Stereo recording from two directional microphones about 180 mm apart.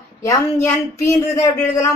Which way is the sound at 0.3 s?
15° left (ahead or behind).